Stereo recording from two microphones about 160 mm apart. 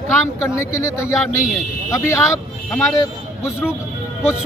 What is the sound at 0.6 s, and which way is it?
Speech, 15° left (ahead or behind).